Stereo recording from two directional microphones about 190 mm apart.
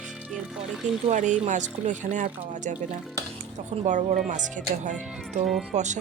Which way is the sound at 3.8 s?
35° right (ahead or behind).